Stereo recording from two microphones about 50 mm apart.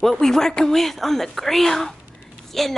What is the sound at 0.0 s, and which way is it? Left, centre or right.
Speech, centre.